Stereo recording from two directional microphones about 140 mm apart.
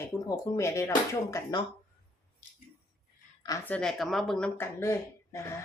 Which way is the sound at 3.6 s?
10° left (ahead or behind).